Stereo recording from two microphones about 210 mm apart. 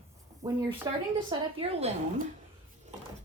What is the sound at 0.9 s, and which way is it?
A woman's voice, 20° right (ahead or behind).